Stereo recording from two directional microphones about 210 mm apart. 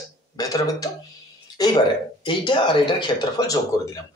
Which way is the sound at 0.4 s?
15° left (ahead or behind).